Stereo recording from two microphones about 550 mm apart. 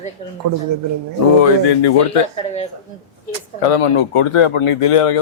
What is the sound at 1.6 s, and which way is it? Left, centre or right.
Speech, left.